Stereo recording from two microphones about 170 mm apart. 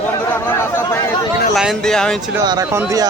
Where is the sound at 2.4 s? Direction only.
20° right (ahead or behind).